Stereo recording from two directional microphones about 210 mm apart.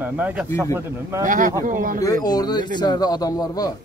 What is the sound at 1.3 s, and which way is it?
Speech, 40° right (ahead or behind).